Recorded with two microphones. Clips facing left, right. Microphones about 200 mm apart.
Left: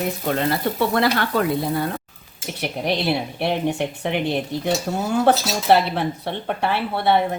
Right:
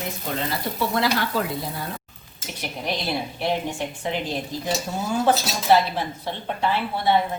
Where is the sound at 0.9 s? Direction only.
60° left (ahead or behind).